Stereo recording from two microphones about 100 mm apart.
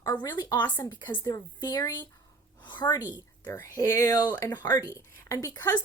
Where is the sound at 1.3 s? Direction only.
35° left (ahead or behind).